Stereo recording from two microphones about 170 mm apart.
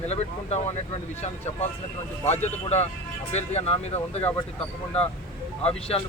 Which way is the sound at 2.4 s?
40° left (ahead or behind).